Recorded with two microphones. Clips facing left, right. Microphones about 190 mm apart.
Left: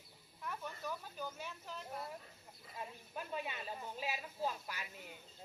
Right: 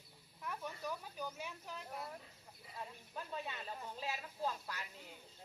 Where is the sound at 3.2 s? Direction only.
15° left (ahead or behind).